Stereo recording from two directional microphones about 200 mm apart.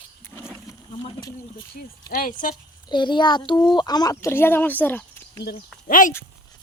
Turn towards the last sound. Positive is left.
turn(degrees=40)  # may be behind; listen again after turning